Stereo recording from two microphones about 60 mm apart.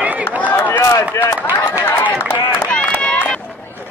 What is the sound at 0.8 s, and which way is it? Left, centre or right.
Chop, left.